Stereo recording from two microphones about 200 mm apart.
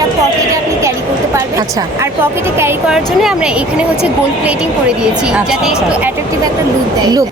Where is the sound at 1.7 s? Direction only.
15° right (ahead or behind).